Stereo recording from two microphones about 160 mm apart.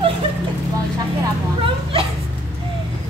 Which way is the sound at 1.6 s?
35° right (ahead or behind).